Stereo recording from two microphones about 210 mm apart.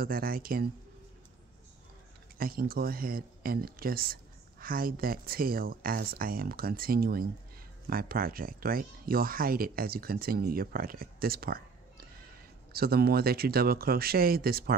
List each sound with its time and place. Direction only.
0.0 s speech: 45° right (ahead or behind)
2.3 s speech: 45° right (ahead or behind)